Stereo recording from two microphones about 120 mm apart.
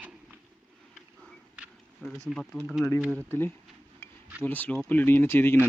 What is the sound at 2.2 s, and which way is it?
Speech, centre (ahead or behind).